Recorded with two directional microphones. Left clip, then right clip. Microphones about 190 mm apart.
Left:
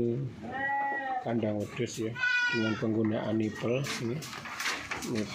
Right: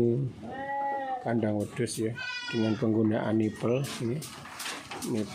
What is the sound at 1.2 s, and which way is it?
Speech, 25° right (ahead or behind).